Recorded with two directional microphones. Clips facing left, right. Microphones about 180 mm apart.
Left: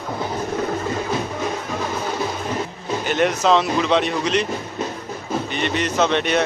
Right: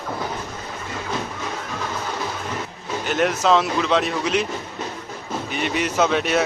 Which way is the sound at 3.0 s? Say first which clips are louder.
Left 1 dB; centre (ahead or behind).